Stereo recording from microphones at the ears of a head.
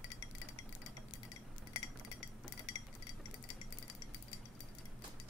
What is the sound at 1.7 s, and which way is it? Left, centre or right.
Cutlery, left.